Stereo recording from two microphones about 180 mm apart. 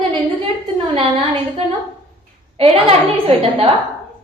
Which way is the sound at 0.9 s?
30° right (ahead or behind).